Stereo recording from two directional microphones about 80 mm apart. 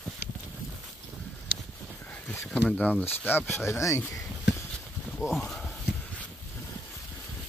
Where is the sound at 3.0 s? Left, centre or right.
Left.